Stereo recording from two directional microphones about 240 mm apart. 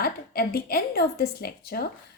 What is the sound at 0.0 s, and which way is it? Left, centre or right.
A woman's voice, left.